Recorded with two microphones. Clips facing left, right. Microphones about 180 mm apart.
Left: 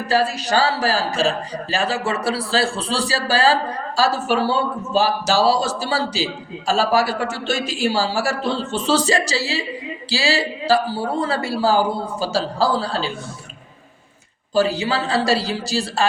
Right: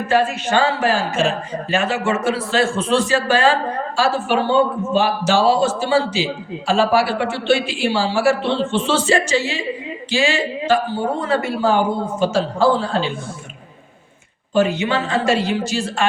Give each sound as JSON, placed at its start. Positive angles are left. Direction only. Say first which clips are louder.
{"t": 0.1, "sound": "a man's voice", "louder": "right 1 dB", "side_deg": 35}
{"t": 14.5, "sound": "a man's voice", "louder": "right 1 dB", "side_deg": 35}